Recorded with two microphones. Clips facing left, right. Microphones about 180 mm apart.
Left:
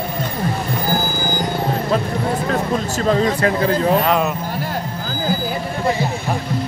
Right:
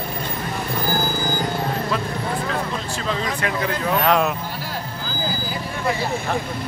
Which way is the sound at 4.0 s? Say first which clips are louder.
Left 1 dB; centre (ahead or behind).